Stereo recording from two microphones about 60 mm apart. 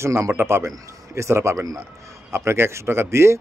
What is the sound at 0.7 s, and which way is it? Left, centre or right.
Speech, right.